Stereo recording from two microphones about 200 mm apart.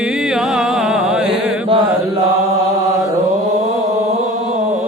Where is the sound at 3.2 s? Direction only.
35° right (ahead or behind).